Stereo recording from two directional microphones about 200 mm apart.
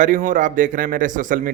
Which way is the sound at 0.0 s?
40° right (ahead or behind).